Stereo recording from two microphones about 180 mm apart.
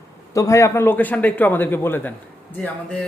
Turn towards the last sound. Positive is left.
turn(degrees=5)  # may be behind; listen again after turning